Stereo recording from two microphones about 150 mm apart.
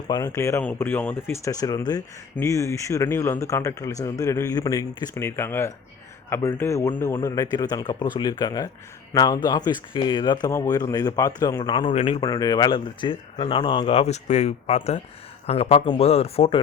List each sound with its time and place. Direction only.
0.1 s speech: 20° left (ahead or behind)
1.5 s speech: 25° left (ahead or behind)
12.2 s speech: 25° left (ahead or behind); by 16.6 s 40° left (ahead or behind)